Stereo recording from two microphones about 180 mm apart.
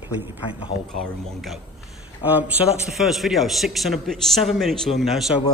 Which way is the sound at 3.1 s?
Centre (ahead or behind).